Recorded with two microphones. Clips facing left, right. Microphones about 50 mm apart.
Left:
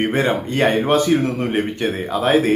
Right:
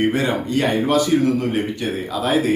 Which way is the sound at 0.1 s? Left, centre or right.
Left.